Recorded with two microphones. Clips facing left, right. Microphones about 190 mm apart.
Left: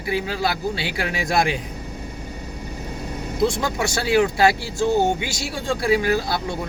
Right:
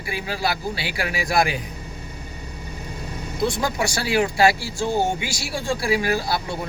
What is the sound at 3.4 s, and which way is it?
Speech, 25° left (ahead or behind).